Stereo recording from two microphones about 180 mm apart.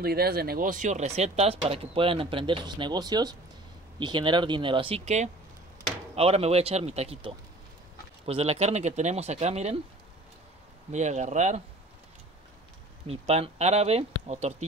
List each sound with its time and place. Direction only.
0.0 s speech: 60° right (ahead or behind); by 9.8 s 35° right (ahead or behind)
10.9 s speech: 40° right (ahead or behind)
13.0 s speech: 35° right (ahead or behind)